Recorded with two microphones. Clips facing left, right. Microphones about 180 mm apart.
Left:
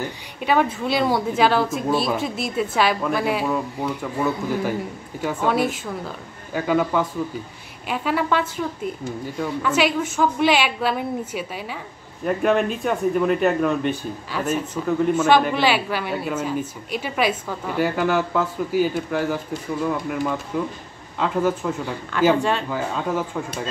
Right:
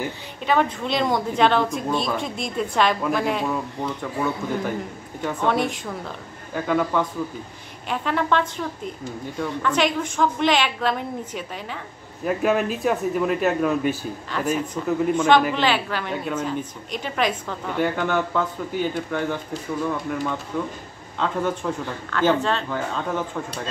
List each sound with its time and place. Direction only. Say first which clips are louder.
0.5 s a woman's voice: left 1 dB; 10° left (ahead or behind)
12.3 s a woman's voice: left 1 dB; centre (ahead or behind)
14.3 s a woman's voice: even; 10° left (ahead or behind)